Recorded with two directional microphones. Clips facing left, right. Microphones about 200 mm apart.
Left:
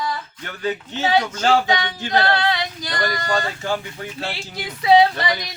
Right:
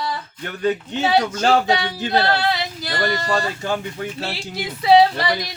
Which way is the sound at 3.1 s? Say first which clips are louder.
Even; 30° right (ahead or behind).